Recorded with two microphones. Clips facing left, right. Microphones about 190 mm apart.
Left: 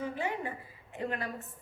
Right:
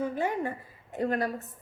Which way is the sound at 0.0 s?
45° right (ahead or behind).